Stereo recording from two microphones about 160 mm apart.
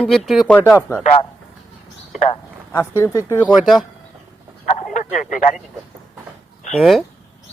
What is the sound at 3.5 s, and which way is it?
Speech, centre (ahead or behind).